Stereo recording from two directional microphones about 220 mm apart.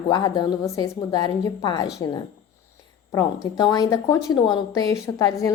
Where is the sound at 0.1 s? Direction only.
20° left (ahead or behind).